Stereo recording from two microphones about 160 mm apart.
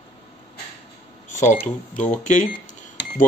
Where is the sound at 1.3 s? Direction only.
50° left (ahead or behind).